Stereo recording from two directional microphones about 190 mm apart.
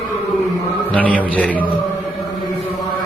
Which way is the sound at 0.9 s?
10° left (ahead or behind).